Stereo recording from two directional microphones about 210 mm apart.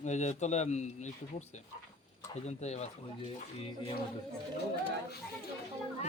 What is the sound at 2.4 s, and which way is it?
Speech, 30° left (ahead or behind).